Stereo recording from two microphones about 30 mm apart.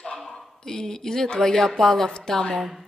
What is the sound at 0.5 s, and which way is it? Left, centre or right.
Speech, centre.